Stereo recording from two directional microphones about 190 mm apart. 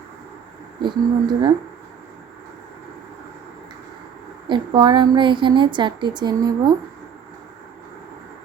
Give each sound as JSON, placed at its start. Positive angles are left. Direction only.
{"t": 0.8, "sound": "a woman's voice", "side_deg": -25}
{"t": 4.4, "sound": "a woman's voice", "side_deg": -25}